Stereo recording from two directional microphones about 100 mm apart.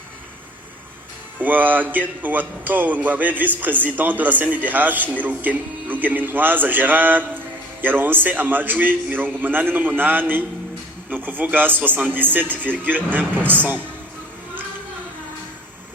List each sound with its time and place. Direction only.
1.4 s a man's voice: 20° right (ahead or behind)